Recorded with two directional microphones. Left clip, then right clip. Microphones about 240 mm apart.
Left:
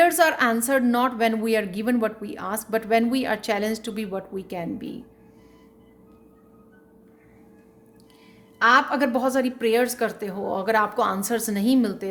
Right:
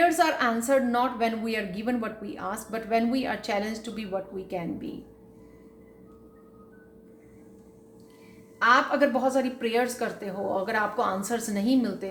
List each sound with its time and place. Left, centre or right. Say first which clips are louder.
0.0 s a woman's voice: left 4 dB; left
8.5 s a woman's voice: left 3 dB; left